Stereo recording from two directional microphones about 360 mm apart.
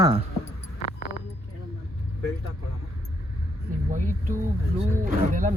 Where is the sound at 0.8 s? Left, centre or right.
Left.